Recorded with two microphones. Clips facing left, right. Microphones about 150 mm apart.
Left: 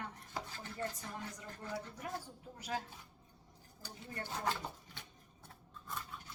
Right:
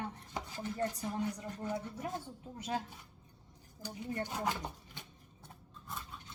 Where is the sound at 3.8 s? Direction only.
15° right (ahead or behind).